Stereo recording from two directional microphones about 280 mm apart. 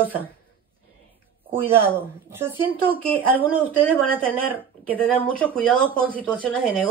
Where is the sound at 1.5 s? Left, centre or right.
Centre.